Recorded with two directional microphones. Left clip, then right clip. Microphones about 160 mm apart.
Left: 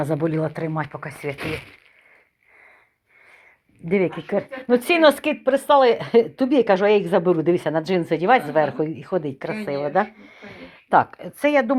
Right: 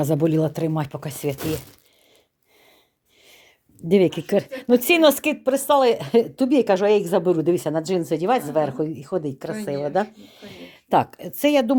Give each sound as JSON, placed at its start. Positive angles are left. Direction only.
{"t": 0.0, "sound": "speech", "side_deg": -55}
{"t": 3.8, "sound": "speech", "side_deg": -70}